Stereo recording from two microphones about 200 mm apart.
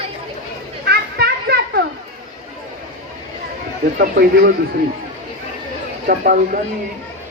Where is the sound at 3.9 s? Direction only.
50° right (ahead or behind).